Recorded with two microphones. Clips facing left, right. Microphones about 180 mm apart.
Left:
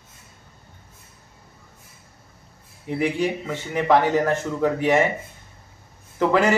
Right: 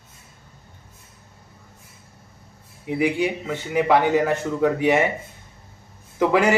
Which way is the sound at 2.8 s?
10° right (ahead or behind).